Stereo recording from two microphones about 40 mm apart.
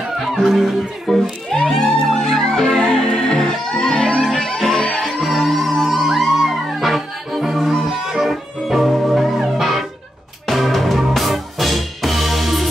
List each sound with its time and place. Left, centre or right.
0.2 s speech: centre
1.5 s music: centre
4.9 s music: centre